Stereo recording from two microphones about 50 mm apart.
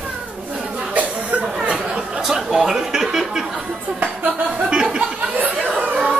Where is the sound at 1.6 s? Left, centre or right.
Centre.